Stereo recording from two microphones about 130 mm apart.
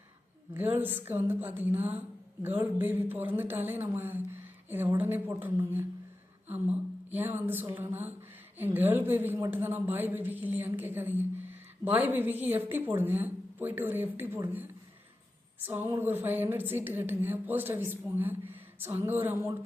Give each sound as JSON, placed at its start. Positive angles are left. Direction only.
{"t": 0.5, "sound": "speech", "side_deg": -15}